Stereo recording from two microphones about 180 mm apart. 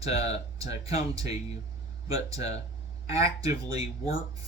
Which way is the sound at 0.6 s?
20° right (ahead or behind).